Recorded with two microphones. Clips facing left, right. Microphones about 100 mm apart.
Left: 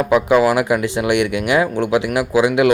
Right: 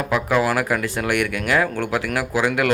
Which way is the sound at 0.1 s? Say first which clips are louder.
Left 6 dB; 15° left (ahead or behind).